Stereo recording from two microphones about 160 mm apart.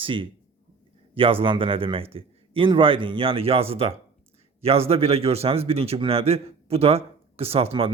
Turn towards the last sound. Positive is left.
turn(degrees=-35)  # may be behind; listen again after turning